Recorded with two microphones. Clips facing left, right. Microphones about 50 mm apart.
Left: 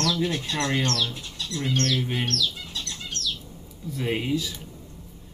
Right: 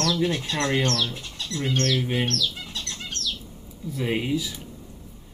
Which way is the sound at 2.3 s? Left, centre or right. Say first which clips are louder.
Even; right.